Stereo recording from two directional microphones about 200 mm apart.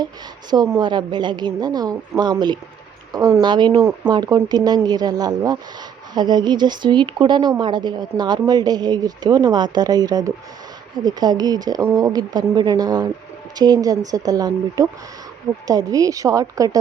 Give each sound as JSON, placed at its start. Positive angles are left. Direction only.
{"t": 0.5, "sound": "a woman's voice", "side_deg": -20}